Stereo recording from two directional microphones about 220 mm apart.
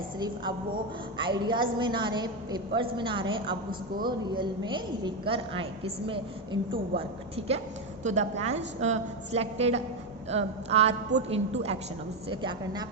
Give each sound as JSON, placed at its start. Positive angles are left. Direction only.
{"t": 1.2, "sound": "a woman's voice", "side_deg": -20}